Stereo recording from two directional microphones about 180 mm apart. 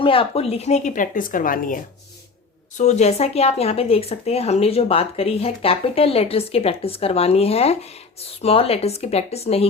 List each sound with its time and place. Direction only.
0.0 s speech: 30° left (ahead or behind); by 1.8 s 50° left (ahead or behind)
2.7 s speech: 40° left (ahead or behind)